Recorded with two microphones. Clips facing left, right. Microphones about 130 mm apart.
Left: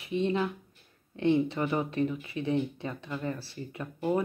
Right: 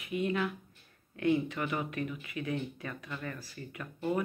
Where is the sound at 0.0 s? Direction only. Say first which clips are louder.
Left 3 dB; 30° left (ahead or behind).